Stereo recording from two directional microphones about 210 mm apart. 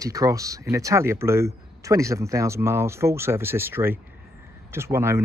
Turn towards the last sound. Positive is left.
turn(degrees=-10)  # may be behind; listen again after turning